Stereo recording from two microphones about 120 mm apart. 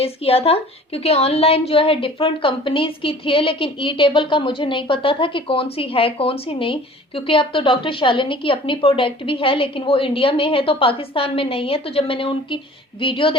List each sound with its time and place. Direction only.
0.0 s a woman's voice: 55° left (ahead or behind)